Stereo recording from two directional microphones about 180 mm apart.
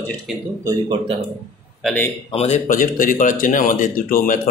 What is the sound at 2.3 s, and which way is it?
Speech, 35° left (ahead or behind).